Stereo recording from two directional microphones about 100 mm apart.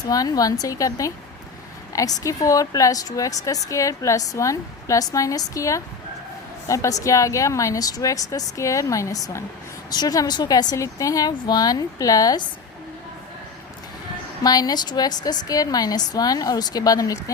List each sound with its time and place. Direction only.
0.0 s a woman's voice: 40° left (ahead or behind)
14.4 s a woman's voice: 40° left (ahead or behind)